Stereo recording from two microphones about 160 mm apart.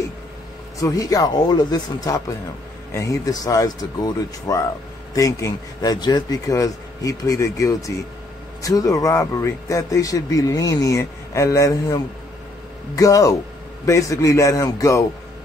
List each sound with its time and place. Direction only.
0.7 s a man's voice: 20° left (ahead or behind)